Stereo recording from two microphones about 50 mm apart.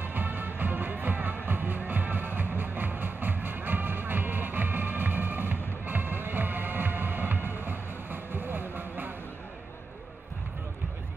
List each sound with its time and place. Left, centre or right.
0.0 s music: right